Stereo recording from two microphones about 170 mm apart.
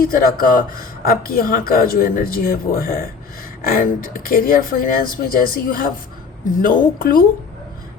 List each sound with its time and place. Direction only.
0.1 s speech: 55° left (ahead or behind)